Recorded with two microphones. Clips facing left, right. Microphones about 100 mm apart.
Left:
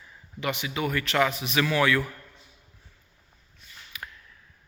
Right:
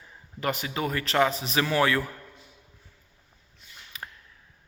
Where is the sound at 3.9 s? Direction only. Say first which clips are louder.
Even; 35° right (ahead or behind).